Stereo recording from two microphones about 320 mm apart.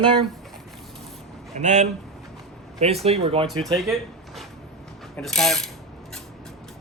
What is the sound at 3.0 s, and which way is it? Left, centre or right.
Speech, centre.